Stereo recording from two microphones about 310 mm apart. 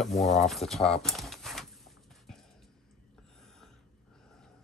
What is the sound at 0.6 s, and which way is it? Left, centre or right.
Speech, centre.